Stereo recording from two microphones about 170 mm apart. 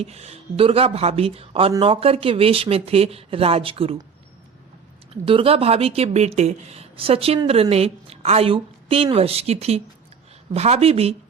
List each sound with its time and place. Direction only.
0.0 s speech: 40° right (ahead or behind)
5.2 s speech: 30° right (ahead or behind)